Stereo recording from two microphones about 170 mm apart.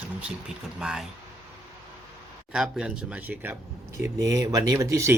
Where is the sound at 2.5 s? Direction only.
5° right (ahead or behind).